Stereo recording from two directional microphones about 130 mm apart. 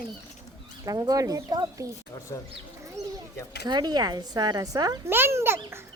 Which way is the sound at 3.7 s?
30° right (ahead or behind).